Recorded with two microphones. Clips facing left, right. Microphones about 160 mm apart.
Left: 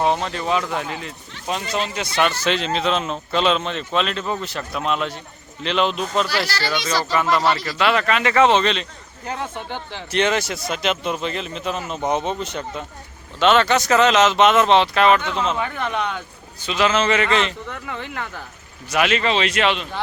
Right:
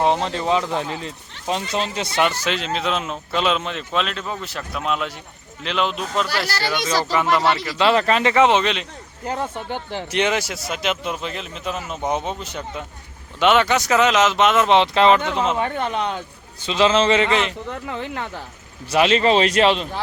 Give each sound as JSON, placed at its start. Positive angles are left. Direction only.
{"t": 0.0, "sound": "speech", "side_deg": -20}
{"t": 2.5, "sound": "a man's voice", "side_deg": -5}
{"t": 6.7, "sound": "speech", "side_deg": -15}
{"t": 8.4, "sound": "a man's voice", "side_deg": -15}
{"t": 14.7, "sound": "speech", "side_deg": -20}
{"t": 15.5, "sound": "speech", "side_deg": -30}
{"t": 17.7, "sound": "speech", "side_deg": -30}